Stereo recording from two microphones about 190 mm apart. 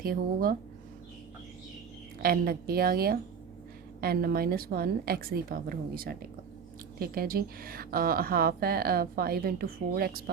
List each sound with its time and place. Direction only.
0.0 s speech: 50° right (ahead or behind)
2.2 s speech: 50° right (ahead or behind)